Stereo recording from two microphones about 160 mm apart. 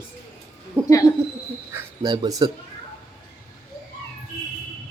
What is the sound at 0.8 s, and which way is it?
Speech, 10° left (ahead or behind).